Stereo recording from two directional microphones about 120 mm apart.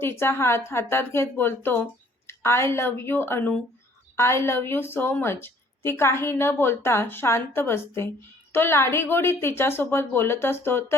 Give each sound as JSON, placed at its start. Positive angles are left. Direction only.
{"t": 0.0, "sound": "a woman's voice", "side_deg": 20}